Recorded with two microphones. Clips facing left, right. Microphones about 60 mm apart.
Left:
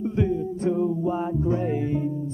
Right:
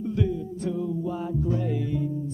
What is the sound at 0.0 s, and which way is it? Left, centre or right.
Music, left.